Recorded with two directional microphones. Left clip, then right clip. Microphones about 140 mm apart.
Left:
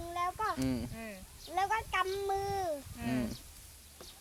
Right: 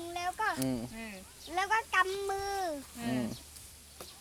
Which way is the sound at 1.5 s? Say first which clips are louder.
Right 2 dB; 5° right (ahead or behind).